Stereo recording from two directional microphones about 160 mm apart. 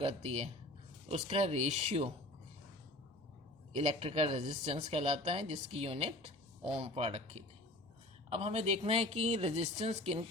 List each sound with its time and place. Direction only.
0.0 s a woman's voice: 40° right (ahead or behind)
3.7 s a woman's voice: 40° right (ahead or behind)
8.3 s a woman's voice: 40° right (ahead or behind)